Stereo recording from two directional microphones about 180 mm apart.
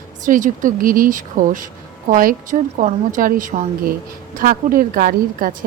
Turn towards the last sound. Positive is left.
turn(degrees=-50)  # may be behind; listen again after turning